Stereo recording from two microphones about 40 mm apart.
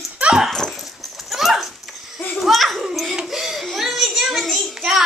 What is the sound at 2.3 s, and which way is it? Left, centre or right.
Children playing, centre.